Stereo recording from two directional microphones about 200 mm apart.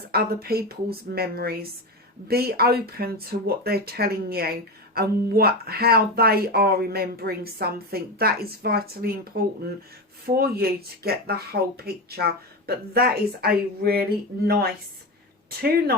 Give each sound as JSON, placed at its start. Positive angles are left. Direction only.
{"t": 0.1, "sound": "speech", "side_deg": -50}